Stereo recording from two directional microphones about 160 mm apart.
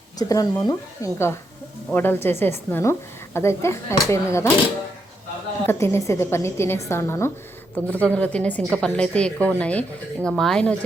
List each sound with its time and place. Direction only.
0.2 s a woman's voice: 20° left (ahead or behind)
5.6 s a woman's voice: 15° left (ahead or behind)